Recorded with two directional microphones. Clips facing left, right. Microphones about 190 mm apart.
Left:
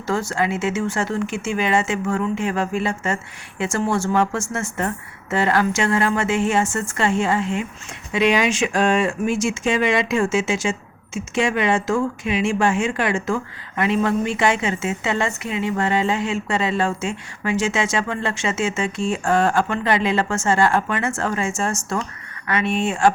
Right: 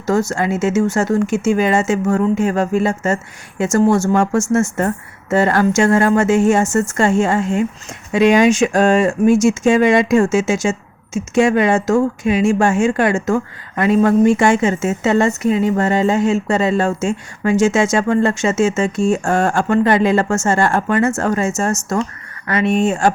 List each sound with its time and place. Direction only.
0.0 s speech: 45° right (ahead or behind)